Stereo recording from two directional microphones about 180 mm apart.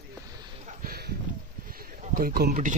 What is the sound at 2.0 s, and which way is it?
Speech, 55° right (ahead or behind).